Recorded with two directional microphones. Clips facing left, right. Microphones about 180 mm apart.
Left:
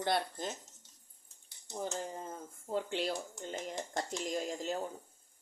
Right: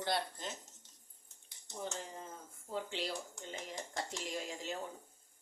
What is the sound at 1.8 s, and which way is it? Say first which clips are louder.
Speech: left 5 dB; 45° left (ahead or behind).